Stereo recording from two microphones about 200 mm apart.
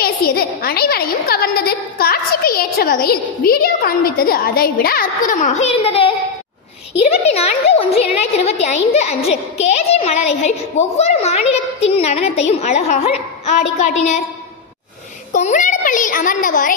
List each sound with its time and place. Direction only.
0.0 s a woman's voice: 50° left (ahead or behind); by 6.1 s 30° left (ahead or behind)
7.2 s a child's voice: 30° left (ahead or behind)
15.3 s a child's voice: 40° left (ahead or behind)